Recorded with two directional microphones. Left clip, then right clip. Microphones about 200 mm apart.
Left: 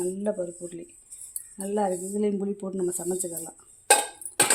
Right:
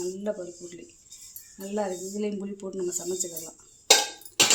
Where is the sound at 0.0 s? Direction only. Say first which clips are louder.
Left 3 dB; 50° left (ahead or behind).